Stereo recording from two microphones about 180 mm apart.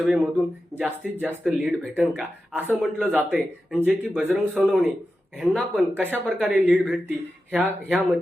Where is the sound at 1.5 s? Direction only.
5° right (ahead or behind).